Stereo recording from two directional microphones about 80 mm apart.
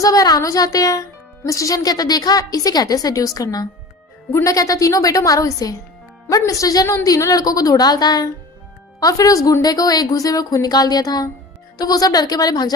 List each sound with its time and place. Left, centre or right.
0.0 s a woman's voice: left